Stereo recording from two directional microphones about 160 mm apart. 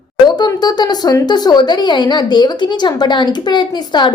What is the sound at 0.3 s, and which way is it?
A woman's voice, 25° left (ahead or behind).